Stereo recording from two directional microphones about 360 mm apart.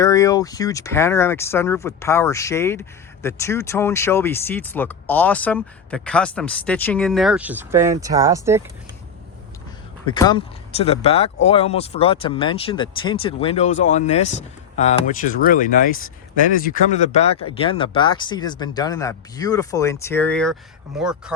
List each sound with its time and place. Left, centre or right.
0.0 s speech: centre
10.1 s speech: centre